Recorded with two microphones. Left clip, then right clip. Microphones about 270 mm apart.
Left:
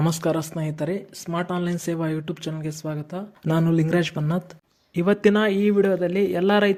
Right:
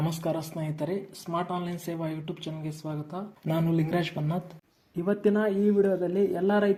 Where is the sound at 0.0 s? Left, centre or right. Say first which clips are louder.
Left 7 dB; left.